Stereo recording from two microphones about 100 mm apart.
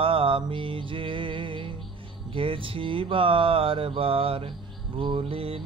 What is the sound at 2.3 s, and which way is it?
Mantra, 60° right (ahead or behind).